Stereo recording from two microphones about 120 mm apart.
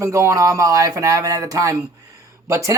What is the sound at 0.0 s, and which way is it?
Speech, 25° right (ahead or behind).